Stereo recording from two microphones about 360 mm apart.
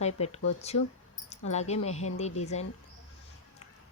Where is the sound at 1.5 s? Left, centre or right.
Centre.